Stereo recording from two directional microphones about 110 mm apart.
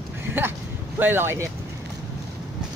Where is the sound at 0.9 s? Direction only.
20° right (ahead or behind).